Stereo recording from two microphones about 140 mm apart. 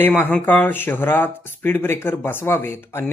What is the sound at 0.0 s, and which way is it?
Speech, 15° left (ahead or behind).